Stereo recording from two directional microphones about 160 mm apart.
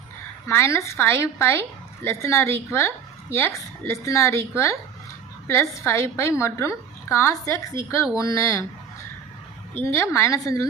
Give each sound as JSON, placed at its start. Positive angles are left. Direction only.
{"t": 0.4, "sound": "a woman's voice", "side_deg": 15}
{"t": 9.8, "sound": "a woman's voice", "side_deg": 15}